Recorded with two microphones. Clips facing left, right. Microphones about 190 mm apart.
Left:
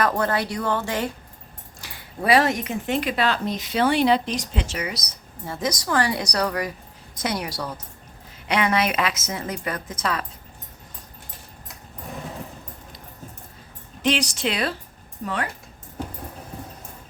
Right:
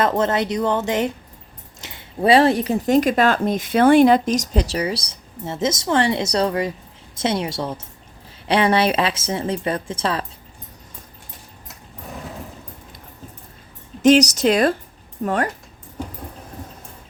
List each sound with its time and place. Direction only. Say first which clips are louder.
0.0 s speech: right 4 dB; 20° right (ahead or behind)
14.0 s speech: right 10 dB; 45° right (ahead or behind)